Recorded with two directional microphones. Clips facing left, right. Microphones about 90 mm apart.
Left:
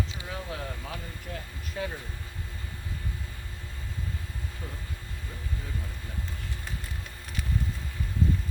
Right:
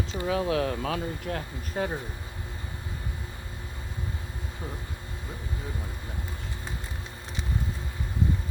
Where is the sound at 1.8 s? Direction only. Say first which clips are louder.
Right 4 dB; 45° right (ahead or behind).